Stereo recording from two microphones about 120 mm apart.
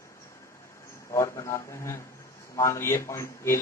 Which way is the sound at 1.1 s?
25° left (ahead or behind).